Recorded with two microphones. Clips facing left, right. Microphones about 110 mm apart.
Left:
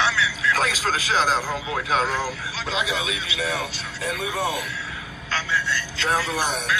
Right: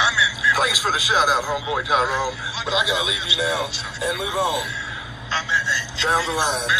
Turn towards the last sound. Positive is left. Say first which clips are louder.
# right 2 dB
turn(degrees=-20)  # may be behind; listen again after turning